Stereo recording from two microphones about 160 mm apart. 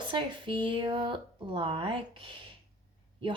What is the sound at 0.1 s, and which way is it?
Speech, 30° right (ahead or behind).